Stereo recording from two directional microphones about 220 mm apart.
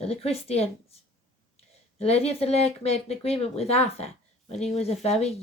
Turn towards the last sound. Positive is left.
turn(degrees=30)  # may be behind; listen again after turning